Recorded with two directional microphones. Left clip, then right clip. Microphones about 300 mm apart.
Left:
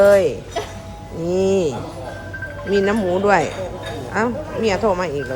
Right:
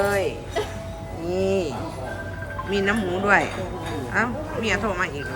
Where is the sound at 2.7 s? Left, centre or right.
Centre.